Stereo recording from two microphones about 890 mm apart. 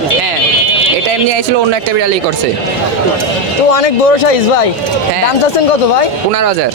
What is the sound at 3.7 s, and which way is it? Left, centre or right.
Speech, left.